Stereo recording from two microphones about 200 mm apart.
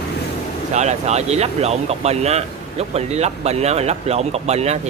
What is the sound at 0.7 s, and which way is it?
Speech, 35° right (ahead or behind).